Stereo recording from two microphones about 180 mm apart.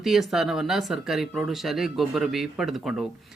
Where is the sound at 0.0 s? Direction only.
Centre (ahead or behind).